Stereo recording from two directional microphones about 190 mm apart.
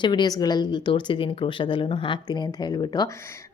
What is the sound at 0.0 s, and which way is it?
A woman's voice, 25° left (ahead or behind).